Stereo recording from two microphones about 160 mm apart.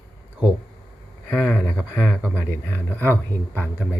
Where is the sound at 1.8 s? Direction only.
Centre (ahead or behind).